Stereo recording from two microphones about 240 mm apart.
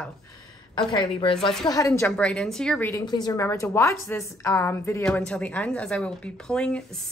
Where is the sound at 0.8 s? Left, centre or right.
Centre.